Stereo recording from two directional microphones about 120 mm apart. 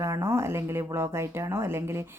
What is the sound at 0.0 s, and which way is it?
Speech, 25° right (ahead or behind).